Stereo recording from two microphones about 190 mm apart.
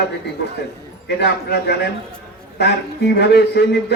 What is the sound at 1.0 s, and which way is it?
Speech, 60° left (ahead or behind).